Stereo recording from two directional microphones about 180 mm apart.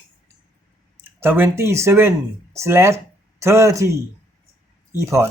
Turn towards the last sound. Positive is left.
turn(degrees=-15)  # may be behind; listen again after turning